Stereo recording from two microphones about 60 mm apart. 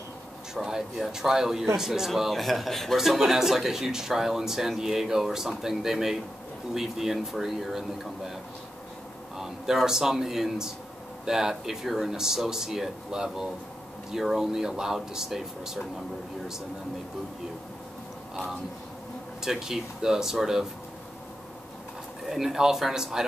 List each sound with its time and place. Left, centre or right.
0.6 s a man's voice: centre
9.4 s a man's voice: centre
18.3 s a man's voice: centre
22.2 s speech: centre